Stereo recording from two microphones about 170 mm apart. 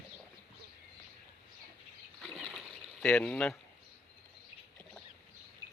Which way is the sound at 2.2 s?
Centre (ahead or behind).